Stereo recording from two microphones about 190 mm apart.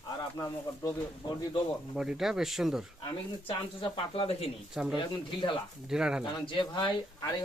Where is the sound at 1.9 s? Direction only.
Centre (ahead or behind).